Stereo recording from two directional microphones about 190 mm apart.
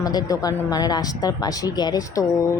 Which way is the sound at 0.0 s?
20° left (ahead or behind).